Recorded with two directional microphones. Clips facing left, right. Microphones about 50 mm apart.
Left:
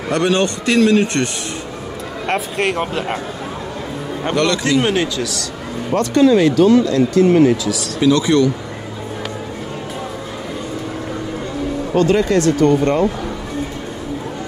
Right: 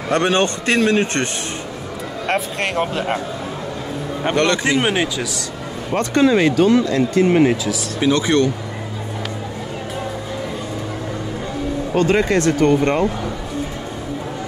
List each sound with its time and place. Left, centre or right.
0.1 s a man's voice: right
2.2 s speech: centre
4.4 s speech: right
5.9 s a man's voice: right
12.0 s a man's voice: right